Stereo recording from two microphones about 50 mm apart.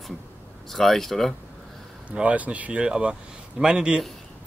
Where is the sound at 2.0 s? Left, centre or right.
Right.